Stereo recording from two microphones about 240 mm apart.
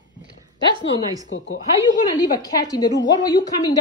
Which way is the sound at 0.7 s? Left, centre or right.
Centre.